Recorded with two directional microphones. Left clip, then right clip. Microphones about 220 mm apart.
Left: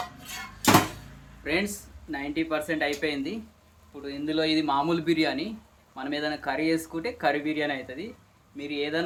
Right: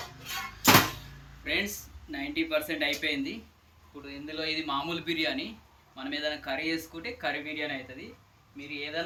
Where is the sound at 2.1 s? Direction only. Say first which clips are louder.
Left 1 dB; 25° left (ahead or behind).